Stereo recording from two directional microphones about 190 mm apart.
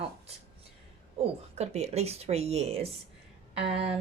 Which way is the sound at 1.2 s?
35° right (ahead or behind).